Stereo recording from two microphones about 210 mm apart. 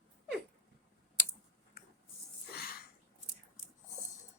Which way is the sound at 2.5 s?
45° left (ahead or behind).